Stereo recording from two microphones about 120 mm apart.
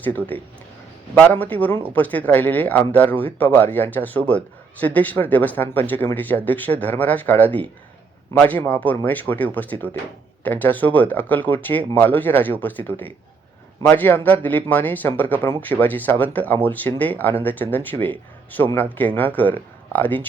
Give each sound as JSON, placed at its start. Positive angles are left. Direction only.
{"t": 0.0, "sound": "speech", "side_deg": 15}